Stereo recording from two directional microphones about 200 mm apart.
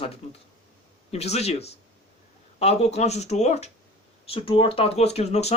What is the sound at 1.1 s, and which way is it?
Speech, 30° left (ahead or behind).